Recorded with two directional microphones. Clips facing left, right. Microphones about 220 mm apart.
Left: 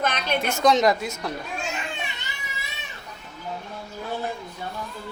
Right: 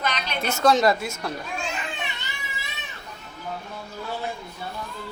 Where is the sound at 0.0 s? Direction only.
50° left (ahead or behind).